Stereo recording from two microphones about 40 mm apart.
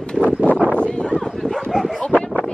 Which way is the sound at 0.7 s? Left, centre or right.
Left.